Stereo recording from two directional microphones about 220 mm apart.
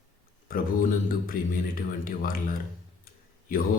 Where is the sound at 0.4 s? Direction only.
40° left (ahead or behind).